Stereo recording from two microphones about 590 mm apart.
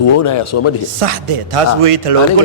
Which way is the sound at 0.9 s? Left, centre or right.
Right.